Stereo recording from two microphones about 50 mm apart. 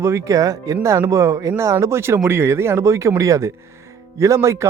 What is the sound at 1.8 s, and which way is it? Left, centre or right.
Speech, right.